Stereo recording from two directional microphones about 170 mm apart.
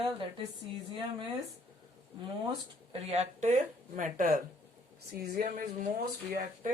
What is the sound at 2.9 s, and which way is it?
Speech, 40° right (ahead or behind).